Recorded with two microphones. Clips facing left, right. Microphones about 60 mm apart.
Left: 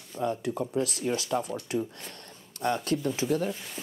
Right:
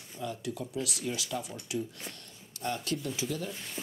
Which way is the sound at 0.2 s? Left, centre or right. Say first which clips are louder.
Left 7 dB; left.